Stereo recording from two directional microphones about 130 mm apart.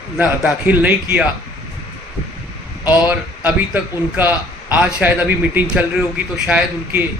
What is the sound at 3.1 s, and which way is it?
Speech, 15° right (ahead or behind).